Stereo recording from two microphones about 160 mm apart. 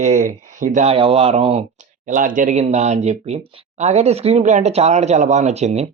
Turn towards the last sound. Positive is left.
turn(degrees=-40)  # may be behind; listen again after turning